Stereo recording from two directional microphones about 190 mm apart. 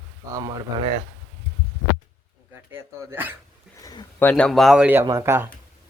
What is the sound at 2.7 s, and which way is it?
Speech, 10° right (ahead or behind).